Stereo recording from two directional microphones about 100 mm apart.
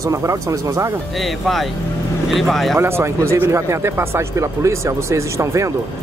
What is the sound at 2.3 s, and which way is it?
Speech, centre (ahead or behind).